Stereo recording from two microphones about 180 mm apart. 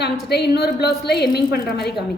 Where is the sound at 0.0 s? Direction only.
65° left (ahead or behind).